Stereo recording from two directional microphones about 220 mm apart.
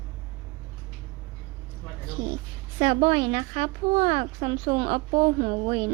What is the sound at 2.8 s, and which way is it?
A woman's voice, 30° right (ahead or behind).